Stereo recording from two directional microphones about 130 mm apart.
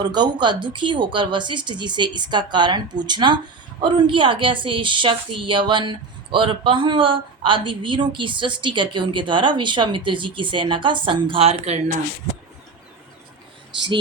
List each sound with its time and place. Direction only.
0.0 s a woman's voice: 35° right (ahead or behind); by 11.8 s 55° right (ahead or behind)